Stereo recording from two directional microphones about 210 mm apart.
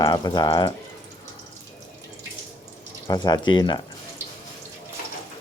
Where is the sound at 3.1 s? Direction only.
20° left (ahead or behind).